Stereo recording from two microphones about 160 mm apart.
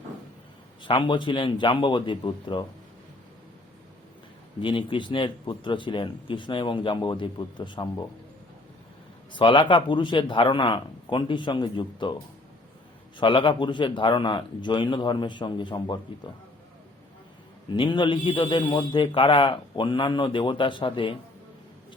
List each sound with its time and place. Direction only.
0.8 s a man's voice: 30° left (ahead or behind)
4.6 s a man's voice: 30° left (ahead or behind)
9.3 s a man's voice: 30° left (ahead or behind)
13.1 s a man's voice: 30° left (ahead or behind)
17.7 s a man's voice: 30° left (ahead or behind)